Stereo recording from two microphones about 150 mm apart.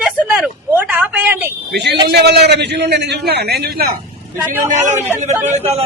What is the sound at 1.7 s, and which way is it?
A man's voice, 90° right.